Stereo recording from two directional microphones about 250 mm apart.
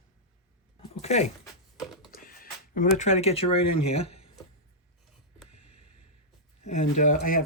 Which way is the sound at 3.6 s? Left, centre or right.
Left.